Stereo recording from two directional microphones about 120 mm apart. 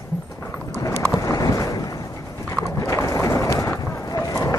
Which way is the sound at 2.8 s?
25° left (ahead or behind).